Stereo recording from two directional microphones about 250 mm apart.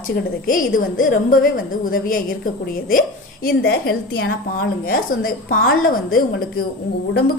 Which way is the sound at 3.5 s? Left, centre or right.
Left.